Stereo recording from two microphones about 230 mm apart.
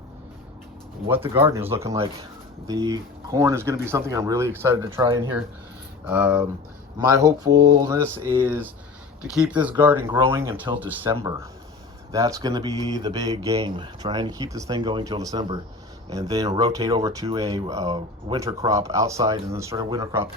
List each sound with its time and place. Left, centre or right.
1.0 s speech: centre
4.9 s speech: right
6.1 s speech: centre
7.2 s speech: centre